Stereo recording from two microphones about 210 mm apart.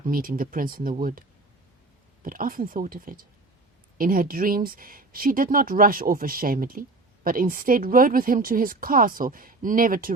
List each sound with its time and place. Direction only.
0.0 s speech: 40° right (ahead or behind)
2.2 s speech: 40° right (ahead or behind)